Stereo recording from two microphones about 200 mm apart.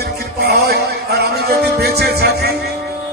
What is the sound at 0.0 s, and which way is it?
Music, 55° right (ahead or behind).